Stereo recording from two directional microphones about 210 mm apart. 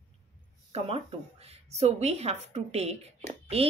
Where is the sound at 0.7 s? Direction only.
25° right (ahead or behind).